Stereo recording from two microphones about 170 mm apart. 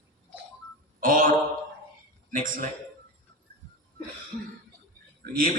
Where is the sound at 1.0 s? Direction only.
55° right (ahead or behind).